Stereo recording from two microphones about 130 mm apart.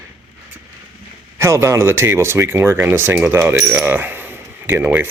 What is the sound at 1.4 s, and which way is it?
Speech, 20° right (ahead or behind).